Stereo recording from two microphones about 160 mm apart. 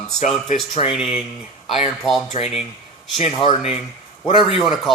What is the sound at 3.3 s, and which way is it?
Speech, 30° left (ahead or behind).